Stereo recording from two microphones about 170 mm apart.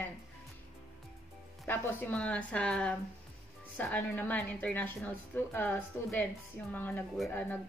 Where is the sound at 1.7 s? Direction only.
10° left (ahead or behind).